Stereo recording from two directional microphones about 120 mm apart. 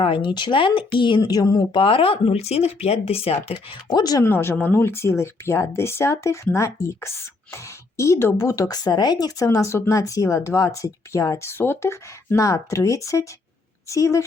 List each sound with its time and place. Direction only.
0.0 s speech: 45° left (ahead or behind)
1.2 s speech: 30° left (ahead or behind)
1.8 s speech: 50° left (ahead or behind)
3.9 s speech: 35° left (ahead or behind)
4.2 s speech: 20° left (ahead or behind)